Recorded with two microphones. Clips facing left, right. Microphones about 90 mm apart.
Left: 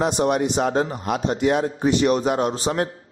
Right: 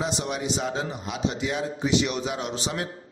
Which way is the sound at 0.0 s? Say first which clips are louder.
Left 9 dB; 55° left (ahead or behind).